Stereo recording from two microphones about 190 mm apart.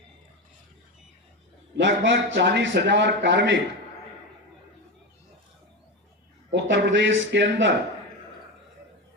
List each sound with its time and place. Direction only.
1.8 s a man's voice: 70° right (ahead or behind)
6.5 s a man's voice: 65° right (ahead or behind)